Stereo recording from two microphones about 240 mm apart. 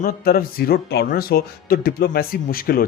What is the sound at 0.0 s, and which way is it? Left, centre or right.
Speech, left.